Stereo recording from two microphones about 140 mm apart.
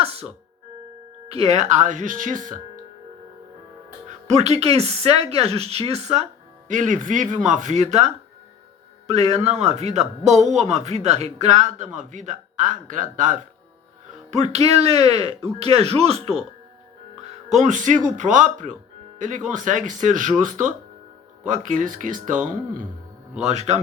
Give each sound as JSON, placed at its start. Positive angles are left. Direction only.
{"t": 0.0, "sound": "speech", "side_deg": -45}
{"t": 1.3, "sound": "speech", "side_deg": -55}
{"t": 4.3, "sound": "speech", "side_deg": -50}
{"t": 6.7, "sound": "speech", "side_deg": -65}
{"t": 14.3, "sound": "speech", "side_deg": -50}
{"t": 17.5, "sound": "speech", "side_deg": -60}
{"t": 23.4, "sound": "speech", "side_deg": -55}